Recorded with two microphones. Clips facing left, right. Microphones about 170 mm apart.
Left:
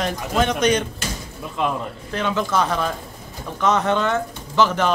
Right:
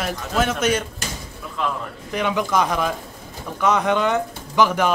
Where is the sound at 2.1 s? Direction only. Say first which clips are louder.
Right 1 dB; 15° right (ahead or behind).